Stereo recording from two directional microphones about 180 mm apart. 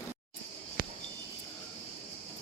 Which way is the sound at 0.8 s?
50° right (ahead or behind).